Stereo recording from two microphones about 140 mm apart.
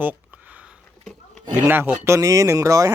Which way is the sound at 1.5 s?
15° right (ahead or behind).